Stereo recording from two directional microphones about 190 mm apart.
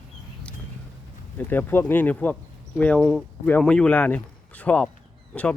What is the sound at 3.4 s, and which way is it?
Speech, 5° left (ahead or behind).